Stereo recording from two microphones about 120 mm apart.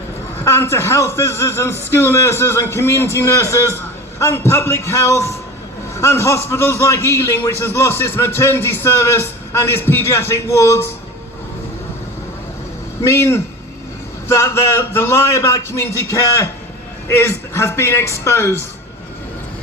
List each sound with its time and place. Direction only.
0.4 s a man's voice: 20° left (ahead or behind)
13.1 s a man's voice: 25° left (ahead or behind)